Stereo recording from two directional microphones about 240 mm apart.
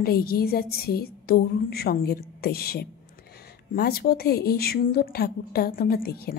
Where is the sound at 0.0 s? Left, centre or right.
Left.